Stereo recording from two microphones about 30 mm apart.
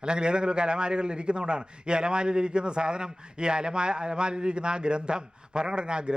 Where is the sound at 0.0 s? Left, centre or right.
Right.